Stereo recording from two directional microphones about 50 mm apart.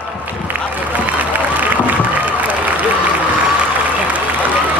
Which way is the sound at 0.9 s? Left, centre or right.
Right.